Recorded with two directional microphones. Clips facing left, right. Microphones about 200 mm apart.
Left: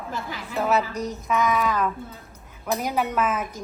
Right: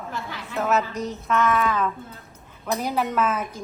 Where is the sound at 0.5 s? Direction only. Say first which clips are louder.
Even; centre (ahead or behind).